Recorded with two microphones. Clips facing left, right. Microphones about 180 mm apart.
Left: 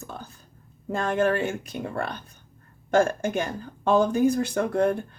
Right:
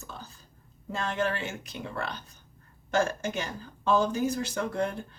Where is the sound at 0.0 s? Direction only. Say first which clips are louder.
Left 5 dB; 55° left (ahead or behind).